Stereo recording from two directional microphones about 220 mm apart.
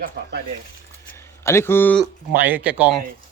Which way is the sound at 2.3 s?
10° right (ahead or behind).